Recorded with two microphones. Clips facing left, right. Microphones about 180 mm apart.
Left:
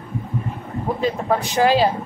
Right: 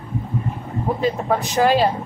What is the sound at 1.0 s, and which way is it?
Speech, centre (ahead or behind).